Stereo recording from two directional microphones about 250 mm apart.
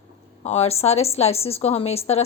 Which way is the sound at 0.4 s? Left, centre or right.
Left.